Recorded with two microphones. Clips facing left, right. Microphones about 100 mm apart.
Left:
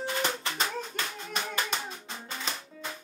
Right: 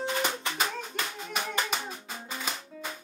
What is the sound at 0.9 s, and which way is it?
Clapping, 15° right (ahead or behind).